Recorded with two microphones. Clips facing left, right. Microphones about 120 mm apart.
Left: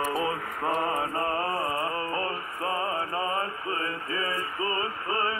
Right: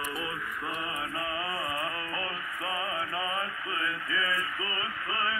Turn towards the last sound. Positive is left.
turn(degrees=35)  # may be behind; listen again after turning